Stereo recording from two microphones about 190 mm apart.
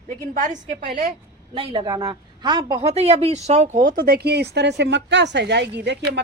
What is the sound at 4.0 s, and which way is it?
A woman's voice, 55° right (ahead or behind).